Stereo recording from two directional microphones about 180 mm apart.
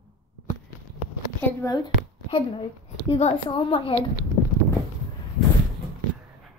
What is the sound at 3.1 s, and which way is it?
Speech, 35° left (ahead or behind).